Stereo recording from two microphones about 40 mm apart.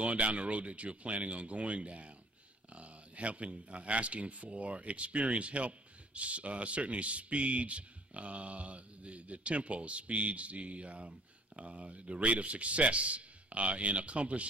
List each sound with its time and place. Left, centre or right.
0.0 s a man's voice: right